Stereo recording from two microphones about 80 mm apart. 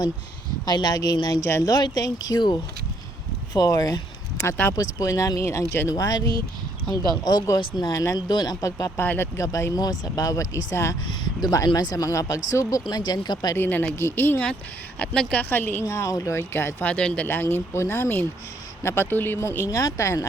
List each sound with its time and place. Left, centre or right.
0.6 s speech: left
5.9 s speech: left
9.0 s speech: left
9.5 s speech: left
11.3 s speech: left
12.9 s speech: left
13.6 s speech: left
14.9 s a woman's voice: centre
15.4 s speech: left
15.9 s speech: left
16.8 s a woman's voice: centre
17.2 s speech: left